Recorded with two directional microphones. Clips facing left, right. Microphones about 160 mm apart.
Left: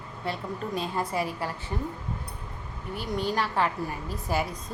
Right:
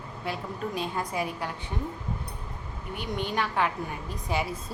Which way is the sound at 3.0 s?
35° left (ahead or behind).